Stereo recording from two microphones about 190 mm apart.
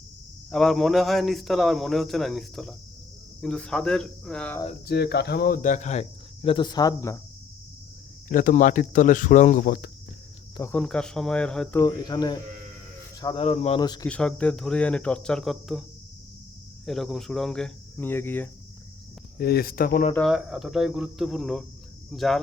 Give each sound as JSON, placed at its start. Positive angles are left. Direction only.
{"t": 0.5, "sound": "speech", "side_deg": 0}
{"t": 4.9, "sound": "speech", "side_deg": 60}
{"t": 8.3, "sound": "speech", "side_deg": 45}
{"t": 10.6, "sound": "speech", "side_deg": 5}
{"t": 11.8, "sound": "speech", "side_deg": 20}
{"t": 13.4, "sound": "speech", "side_deg": 35}
{"t": 14.1, "sound": "speech", "side_deg": 5}
{"t": 16.8, "sound": "speech", "side_deg": 0}
{"t": 19.4, "sound": "speech", "side_deg": 55}
{"t": 20.1, "sound": "speech", "side_deg": 0}